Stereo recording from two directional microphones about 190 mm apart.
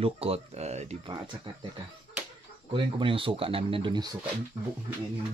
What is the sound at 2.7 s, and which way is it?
Speech, 25° right (ahead or behind).